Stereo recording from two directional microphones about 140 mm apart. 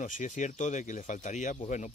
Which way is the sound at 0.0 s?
65° left (ahead or behind).